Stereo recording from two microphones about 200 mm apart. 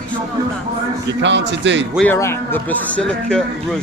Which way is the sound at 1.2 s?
65° right (ahead or behind).